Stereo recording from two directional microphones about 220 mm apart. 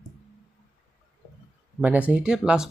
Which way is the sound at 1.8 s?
5° right (ahead or behind).